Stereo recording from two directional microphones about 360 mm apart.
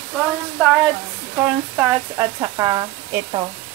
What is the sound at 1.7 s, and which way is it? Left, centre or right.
Speech, centre.